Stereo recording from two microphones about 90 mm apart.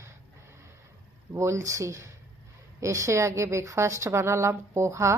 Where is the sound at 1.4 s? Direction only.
35° right (ahead or behind).